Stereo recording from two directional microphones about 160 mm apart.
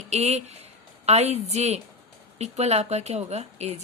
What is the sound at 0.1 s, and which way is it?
A woman's voice, 40° right (ahead or behind).